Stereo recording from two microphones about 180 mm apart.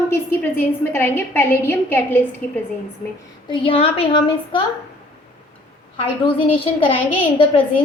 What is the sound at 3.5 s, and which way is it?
A woman's voice, 30° left (ahead or behind).